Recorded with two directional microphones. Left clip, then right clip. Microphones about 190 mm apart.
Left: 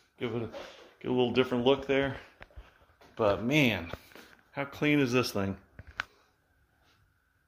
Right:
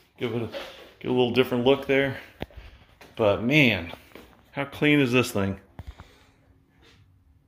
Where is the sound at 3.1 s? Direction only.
5° left (ahead or behind).